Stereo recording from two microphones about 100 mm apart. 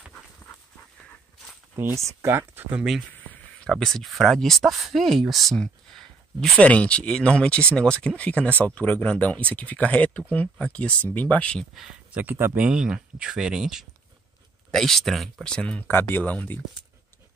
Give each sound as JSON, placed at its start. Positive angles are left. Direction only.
{"t": 1.8, "sound": "speech", "side_deg": -30}
{"t": 3.6, "sound": "speech", "side_deg": 5}
{"t": 11.7, "sound": "speech", "side_deg": -5}
{"t": 12.2, "sound": "speech", "side_deg": -20}
{"t": 15.9, "sound": "speech", "side_deg": 20}